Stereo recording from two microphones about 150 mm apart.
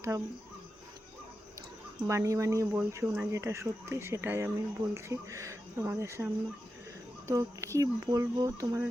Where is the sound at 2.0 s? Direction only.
20° right (ahead or behind).